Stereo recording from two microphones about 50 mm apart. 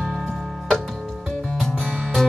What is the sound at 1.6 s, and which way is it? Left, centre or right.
Music, centre.